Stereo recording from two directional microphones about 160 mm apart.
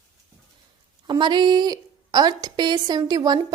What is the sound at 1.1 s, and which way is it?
A woman's voice, 30° right (ahead or behind).